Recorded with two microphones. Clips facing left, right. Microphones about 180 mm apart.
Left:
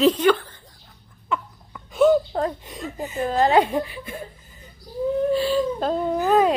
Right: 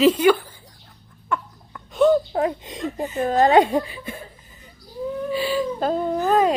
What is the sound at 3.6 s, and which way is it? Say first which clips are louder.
Speech: right 2 dB; 25° right (ahead or behind).